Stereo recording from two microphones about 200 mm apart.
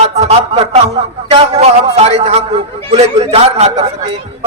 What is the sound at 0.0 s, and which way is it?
Music, 35° right (ahead or behind).